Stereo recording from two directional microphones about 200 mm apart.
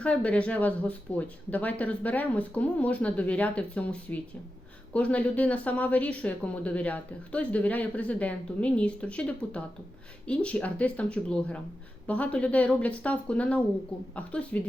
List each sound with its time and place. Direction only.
0.0 s a woman's voice: 5° left (ahead or behind)